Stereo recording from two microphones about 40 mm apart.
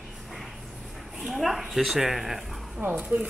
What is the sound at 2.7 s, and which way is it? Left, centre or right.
Speech, right.